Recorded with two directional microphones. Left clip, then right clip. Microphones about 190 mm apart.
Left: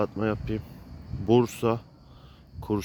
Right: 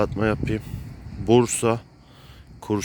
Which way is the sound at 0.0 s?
5° right (ahead or behind).